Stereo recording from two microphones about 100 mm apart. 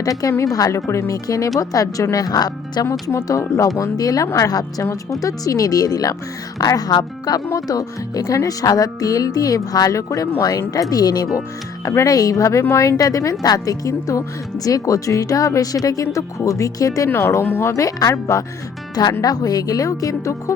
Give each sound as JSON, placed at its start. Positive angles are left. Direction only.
{"t": 0.0, "sound": "speech", "side_deg": 35}
{"t": 3.1, "sound": "speech", "side_deg": 30}